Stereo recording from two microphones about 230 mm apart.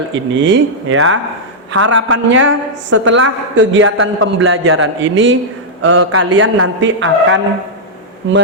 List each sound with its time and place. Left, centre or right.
0.1 s a woman's voice: right